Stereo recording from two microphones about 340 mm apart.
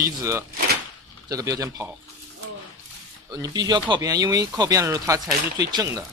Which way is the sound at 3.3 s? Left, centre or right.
Centre.